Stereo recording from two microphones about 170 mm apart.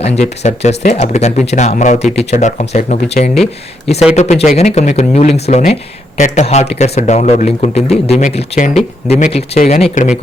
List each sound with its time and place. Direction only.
0.2 s speech: 40° left (ahead or behind)